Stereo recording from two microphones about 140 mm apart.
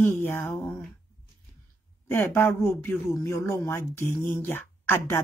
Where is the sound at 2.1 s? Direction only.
15° left (ahead or behind).